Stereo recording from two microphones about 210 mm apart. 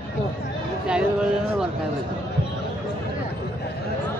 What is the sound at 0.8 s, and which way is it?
Speech, 5° right (ahead or behind).